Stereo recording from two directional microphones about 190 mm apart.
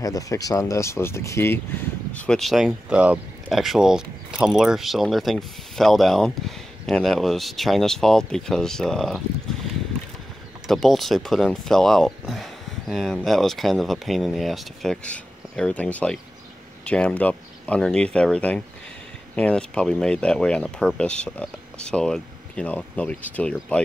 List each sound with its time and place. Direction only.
0.0 s speech: 20° left (ahead or behind); by 9.2 s centre (ahead or behind)
10.7 s speech: centre (ahead or behind)